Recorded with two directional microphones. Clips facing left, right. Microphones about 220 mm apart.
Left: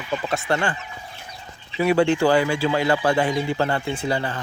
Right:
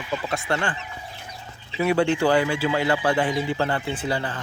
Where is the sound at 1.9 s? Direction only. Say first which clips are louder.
Left 2 dB; 40° left (ahead or behind).